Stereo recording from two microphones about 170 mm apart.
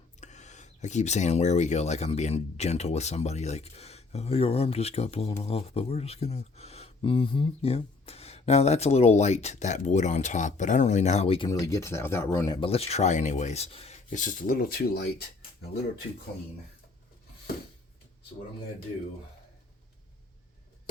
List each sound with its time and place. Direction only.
0.2 s speech: 45° left (ahead or behind)
11.4 s speech: 20° left (ahead or behind)
12.5 s speech: 35° left (ahead or behind); by 15.1 s 65° left (ahead or behind)